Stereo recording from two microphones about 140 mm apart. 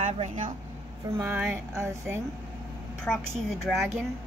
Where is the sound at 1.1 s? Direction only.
15° right (ahead or behind).